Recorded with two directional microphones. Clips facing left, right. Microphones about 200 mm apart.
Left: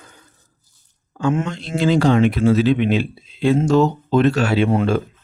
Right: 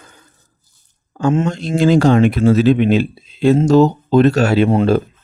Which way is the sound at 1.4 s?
45° right (ahead or behind).